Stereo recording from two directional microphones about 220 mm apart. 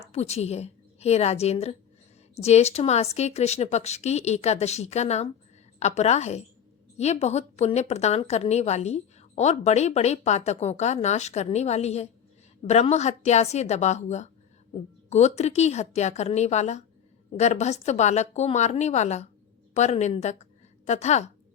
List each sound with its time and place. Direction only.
0.0 s a woman's voice: 30° left (ahead or behind)